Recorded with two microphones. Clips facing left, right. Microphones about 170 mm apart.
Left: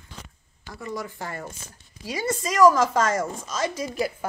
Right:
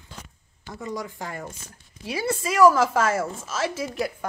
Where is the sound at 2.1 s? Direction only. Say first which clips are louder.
Right 1 dB; 10° right (ahead or behind).